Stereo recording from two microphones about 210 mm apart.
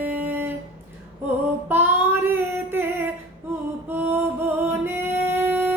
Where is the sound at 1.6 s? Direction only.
10° right (ahead or behind).